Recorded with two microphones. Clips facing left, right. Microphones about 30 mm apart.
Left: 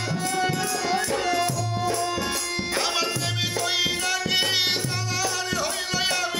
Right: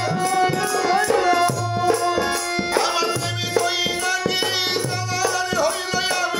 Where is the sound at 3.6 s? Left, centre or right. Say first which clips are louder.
Right 3 dB; centre.